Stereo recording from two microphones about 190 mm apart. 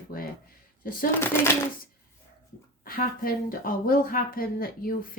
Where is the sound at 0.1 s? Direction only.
50° left (ahead or behind).